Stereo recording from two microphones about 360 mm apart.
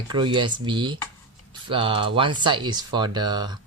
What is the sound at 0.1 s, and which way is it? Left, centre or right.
Speech, centre.